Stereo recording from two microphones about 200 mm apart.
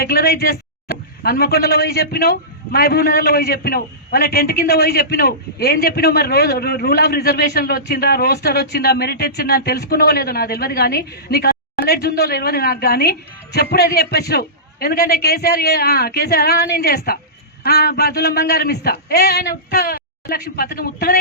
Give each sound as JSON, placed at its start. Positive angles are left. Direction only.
{"t": 0.0, "sound": "speech", "side_deg": 50}